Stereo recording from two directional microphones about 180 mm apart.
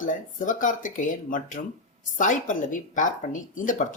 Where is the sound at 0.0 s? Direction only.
45° left (ahead or behind).